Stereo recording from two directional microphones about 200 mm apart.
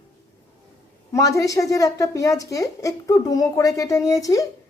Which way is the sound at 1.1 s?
15° left (ahead or behind).